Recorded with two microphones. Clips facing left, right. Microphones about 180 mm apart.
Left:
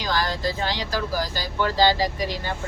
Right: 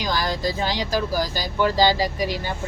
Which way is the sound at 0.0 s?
15° right (ahead or behind).